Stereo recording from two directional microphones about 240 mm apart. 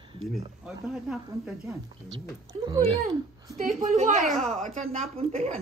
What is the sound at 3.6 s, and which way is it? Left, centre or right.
Speech, right.